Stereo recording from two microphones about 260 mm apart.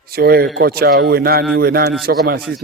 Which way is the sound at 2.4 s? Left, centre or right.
Centre.